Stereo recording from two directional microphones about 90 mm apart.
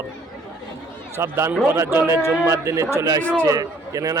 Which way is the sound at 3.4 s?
40° right (ahead or behind).